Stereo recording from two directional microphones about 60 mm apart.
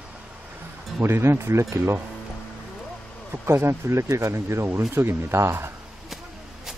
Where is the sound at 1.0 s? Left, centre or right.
Right.